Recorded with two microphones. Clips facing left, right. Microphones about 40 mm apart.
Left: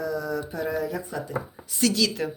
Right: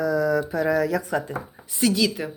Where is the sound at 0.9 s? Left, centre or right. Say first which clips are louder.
Right 6 dB; right.